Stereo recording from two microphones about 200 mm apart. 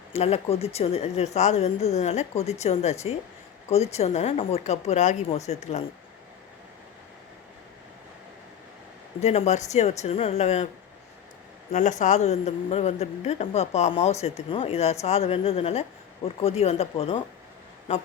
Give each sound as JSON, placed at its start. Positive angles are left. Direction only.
{"t": 0.1, "sound": "speech", "side_deg": 30}
{"t": 9.2, "sound": "speech", "side_deg": 35}
{"t": 11.7, "sound": "speech", "side_deg": 35}